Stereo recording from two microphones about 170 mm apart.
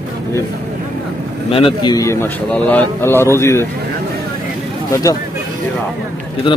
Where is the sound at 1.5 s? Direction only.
30° left (ahead or behind); by 3.6 s 15° left (ahead or behind).